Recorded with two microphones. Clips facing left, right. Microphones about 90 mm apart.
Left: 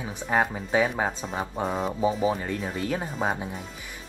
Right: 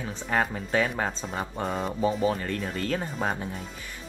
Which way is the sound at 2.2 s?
15° left (ahead or behind).